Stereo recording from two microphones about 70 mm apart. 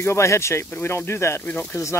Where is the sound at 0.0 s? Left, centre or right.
Left.